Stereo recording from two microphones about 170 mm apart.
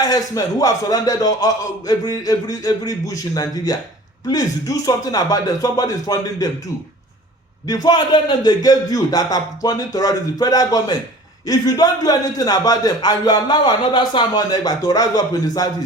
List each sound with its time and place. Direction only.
0.0 s a man's voice: 20° left (ahead or behind)
7.7 s a man's voice: 25° left (ahead or behind)